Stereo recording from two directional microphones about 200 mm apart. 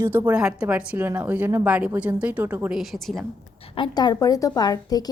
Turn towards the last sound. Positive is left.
turn(degrees=20)  # may be behind; listen again after turning